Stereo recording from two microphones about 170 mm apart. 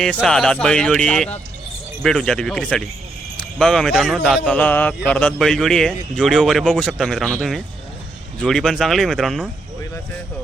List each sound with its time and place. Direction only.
0.0 s a man's voice: 5° left (ahead or behind)